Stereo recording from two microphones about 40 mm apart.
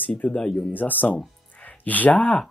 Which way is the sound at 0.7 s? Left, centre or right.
Left.